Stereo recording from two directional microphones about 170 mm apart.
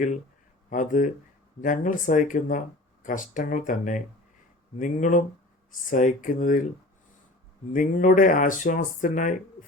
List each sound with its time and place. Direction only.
0.7 s speech: 50° left (ahead or behind)
7.7 s speech: 50° left (ahead or behind)